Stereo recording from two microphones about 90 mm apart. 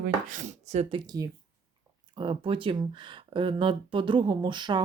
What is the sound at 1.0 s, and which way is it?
Speech, 45° right (ahead or behind).